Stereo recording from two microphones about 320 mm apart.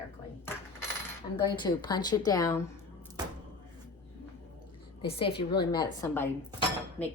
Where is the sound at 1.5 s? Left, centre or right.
Centre.